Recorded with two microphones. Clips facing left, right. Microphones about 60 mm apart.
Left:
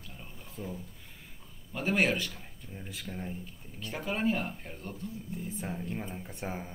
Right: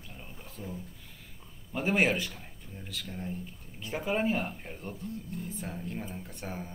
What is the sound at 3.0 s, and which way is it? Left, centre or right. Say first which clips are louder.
Speech: right 1 dB; centre.